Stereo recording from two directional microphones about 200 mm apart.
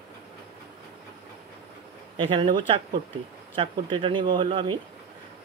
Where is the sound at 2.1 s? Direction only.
25° right (ahead or behind).